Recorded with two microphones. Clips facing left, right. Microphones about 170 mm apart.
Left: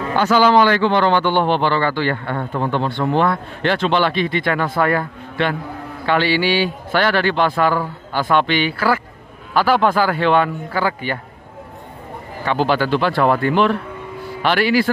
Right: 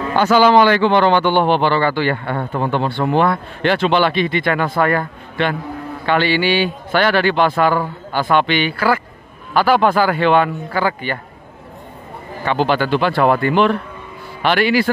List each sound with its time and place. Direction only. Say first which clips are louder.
0.2 s a man's voice: right 2 dB; 20° right (ahead or behind); by 11.1 s 5° left (ahead or behind)
12.4 s speech: right 1 dB; 5° left (ahead or behind)